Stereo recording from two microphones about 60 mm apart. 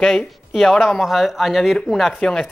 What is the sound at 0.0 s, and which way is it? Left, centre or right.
Speech, centre.